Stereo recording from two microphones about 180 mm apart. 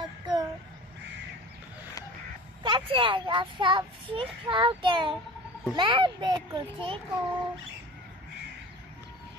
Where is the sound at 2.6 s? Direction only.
30° right (ahead or behind).